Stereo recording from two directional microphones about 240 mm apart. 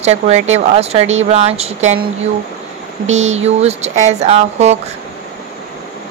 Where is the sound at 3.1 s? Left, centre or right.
Right.